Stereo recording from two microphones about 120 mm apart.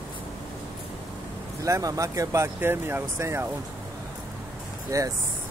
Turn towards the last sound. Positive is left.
turn(degrees=-25)  # may be behind; listen again after turning